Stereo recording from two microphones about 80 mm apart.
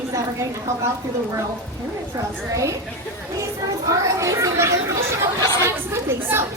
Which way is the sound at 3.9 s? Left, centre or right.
Right.